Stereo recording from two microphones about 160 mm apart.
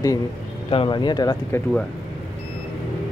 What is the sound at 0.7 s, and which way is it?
Speech, 30° left (ahead or behind).